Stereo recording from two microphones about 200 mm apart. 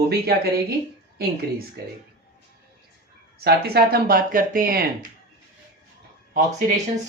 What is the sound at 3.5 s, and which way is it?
Speech, 50° right (ahead or behind).